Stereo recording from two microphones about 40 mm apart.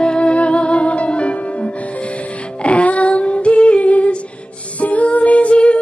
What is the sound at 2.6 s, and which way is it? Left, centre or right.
Female singing, left.